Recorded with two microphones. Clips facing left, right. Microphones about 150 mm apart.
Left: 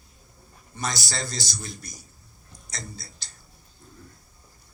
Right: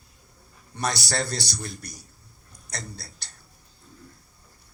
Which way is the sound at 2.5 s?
65° right (ahead or behind).